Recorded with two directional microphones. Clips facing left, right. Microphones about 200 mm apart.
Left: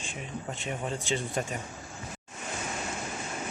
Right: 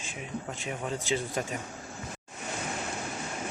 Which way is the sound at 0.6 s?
Centre (ahead or behind).